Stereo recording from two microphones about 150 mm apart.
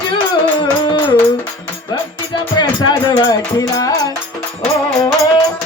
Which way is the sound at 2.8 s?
30° left (ahead or behind).